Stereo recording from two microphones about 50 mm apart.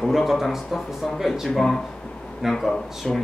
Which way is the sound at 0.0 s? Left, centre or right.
Centre.